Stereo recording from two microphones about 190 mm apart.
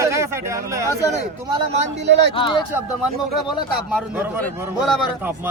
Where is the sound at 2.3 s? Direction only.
25° left (ahead or behind).